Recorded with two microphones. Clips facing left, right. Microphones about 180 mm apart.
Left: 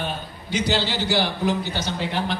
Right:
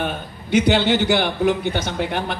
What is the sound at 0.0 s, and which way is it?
A man's voice, 60° right (ahead or behind).